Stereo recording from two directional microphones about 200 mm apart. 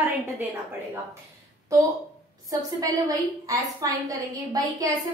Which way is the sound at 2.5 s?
15° right (ahead or behind).